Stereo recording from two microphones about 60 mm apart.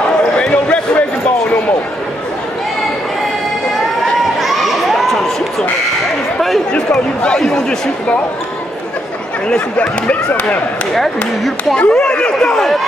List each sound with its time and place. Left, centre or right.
0.4 s basketball bounce: left
4.4 s crowd: centre
6.7 s chatter: centre
9.8 s speech: left
11.7 s speech: centre